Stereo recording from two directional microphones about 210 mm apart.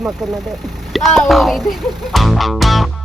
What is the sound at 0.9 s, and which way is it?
Music, centre (ahead or behind).